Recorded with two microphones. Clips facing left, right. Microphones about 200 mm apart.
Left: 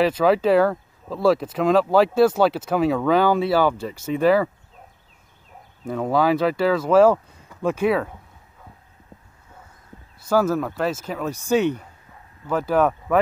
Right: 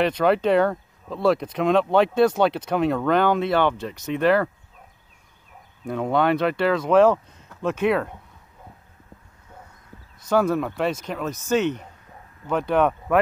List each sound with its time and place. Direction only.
0.0 s speech: 5° left (ahead or behind)
5.9 s speech: centre (ahead or behind)
10.3 s speech: 5° left (ahead or behind)